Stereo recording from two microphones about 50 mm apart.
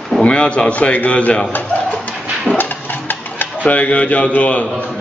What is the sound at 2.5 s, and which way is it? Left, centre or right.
Speech, left.